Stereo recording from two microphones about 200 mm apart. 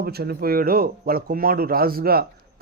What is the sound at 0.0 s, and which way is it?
Speech, 50° right (ahead or behind).